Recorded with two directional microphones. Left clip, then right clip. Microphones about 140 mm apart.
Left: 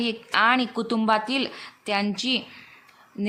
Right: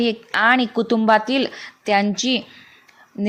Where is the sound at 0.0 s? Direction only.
35° right (ahead or behind).